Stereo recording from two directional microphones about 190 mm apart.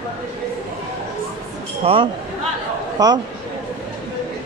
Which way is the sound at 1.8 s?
30° right (ahead or behind).